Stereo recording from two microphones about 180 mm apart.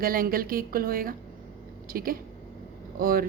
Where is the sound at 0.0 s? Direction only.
50° right (ahead or behind).